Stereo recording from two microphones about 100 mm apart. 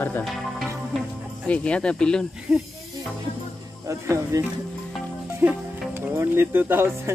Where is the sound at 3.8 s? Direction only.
30° right (ahead or behind).